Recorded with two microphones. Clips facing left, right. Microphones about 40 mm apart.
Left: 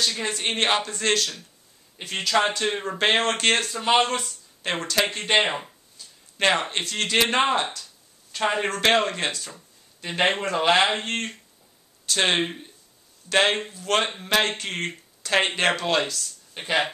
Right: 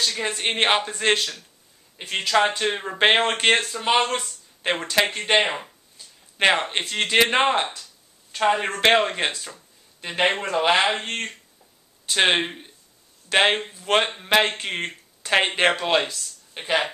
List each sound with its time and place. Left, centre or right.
0.2 s speech: centre
12.1 s speech: centre